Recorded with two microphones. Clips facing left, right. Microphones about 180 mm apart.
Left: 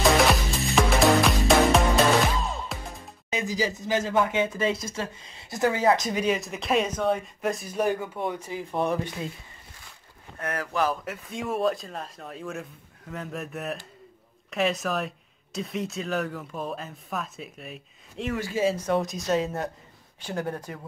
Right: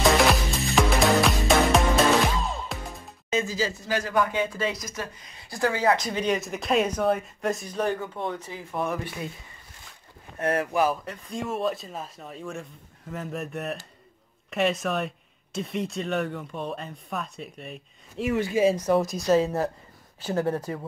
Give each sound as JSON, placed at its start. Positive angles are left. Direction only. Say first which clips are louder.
{"t": 0.2, "sound": "music", "louder": "even", "side_deg": 0}
{"t": 3.3, "sound": "speech", "louder": "right 1 dB", "side_deg": 15}
{"t": 6.2, "sound": "speech", "louder": "even", "side_deg": 0}
{"t": 10.4, "sound": "speech", "louder": "right 6 dB", "side_deg": -25}
{"t": 10.7, "sound": "speech", "louder": "left 1 dB", "side_deg": -10}
{"t": 11.1, "sound": "speech", "louder": "even", "side_deg": 0}
{"t": 18.3, "sound": "speech", "louder": "right 4 dB", "side_deg": -20}
{"t": 18.9, "sound": "speech", "louder": "right 3 dB", "side_deg": 0}